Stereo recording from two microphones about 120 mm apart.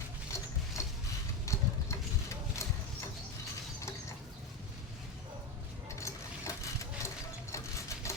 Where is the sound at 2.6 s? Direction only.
25° left (ahead or behind).